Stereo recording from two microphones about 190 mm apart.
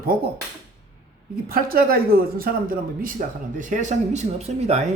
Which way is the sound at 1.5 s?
50° right (ahead or behind).